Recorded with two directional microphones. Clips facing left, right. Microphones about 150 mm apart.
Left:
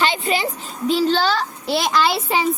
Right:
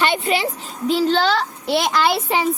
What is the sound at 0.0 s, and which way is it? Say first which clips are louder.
A woman's voice: right 1 dB; 65° right (ahead or behind).